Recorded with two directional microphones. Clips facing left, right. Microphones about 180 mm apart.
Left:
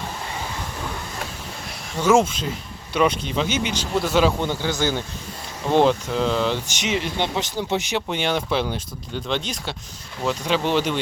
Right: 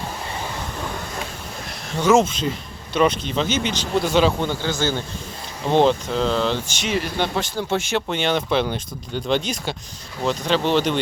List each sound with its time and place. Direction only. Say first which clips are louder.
2.0 s speech: right 1 dB; 10° left (ahead or behind)